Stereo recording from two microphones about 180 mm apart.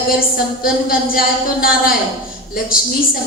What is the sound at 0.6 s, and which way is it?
A woman's voice, 55° left (ahead or behind).